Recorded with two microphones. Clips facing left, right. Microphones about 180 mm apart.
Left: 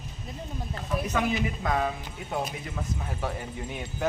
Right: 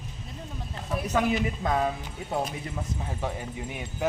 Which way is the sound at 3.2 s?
15° right (ahead or behind).